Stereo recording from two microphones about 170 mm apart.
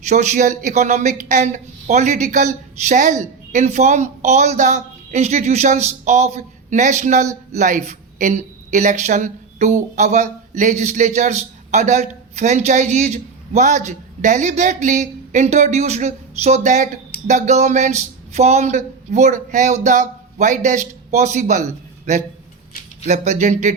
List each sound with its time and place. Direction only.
0.0 s speech: 45° right (ahead or behind)